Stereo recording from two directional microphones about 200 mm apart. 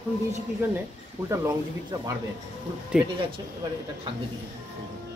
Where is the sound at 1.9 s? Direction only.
20° right (ahead or behind).